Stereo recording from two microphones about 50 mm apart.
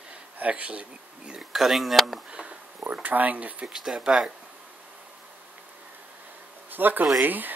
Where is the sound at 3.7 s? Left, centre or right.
Centre.